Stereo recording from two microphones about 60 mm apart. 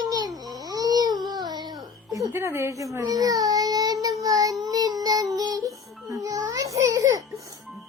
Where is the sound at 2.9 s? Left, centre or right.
Right.